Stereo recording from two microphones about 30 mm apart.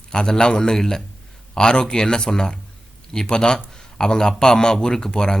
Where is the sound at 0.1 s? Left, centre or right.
Left.